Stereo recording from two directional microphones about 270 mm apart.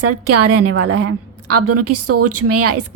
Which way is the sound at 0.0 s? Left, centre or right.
Right.